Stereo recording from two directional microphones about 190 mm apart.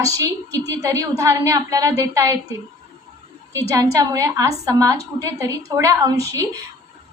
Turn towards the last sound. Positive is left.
turn(degrees=-20)  # may be behind; listen again after turning